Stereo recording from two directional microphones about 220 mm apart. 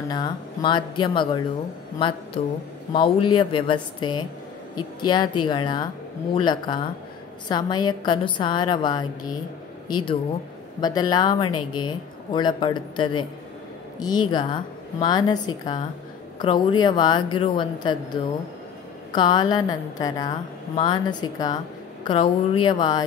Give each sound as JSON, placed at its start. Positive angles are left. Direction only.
{"t": 0.1, "sound": "a woman's voice", "side_deg": 20}